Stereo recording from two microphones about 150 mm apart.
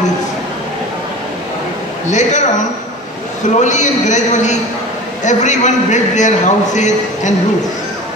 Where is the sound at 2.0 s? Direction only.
55° left (ahead or behind).